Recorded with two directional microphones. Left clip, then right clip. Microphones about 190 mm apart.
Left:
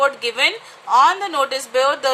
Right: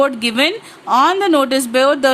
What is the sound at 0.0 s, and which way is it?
A woman's voice, 45° right (ahead or behind).